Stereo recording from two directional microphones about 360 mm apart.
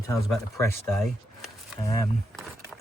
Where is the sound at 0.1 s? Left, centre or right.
Centre.